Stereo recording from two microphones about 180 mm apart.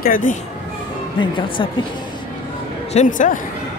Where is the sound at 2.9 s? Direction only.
45° left (ahead or behind).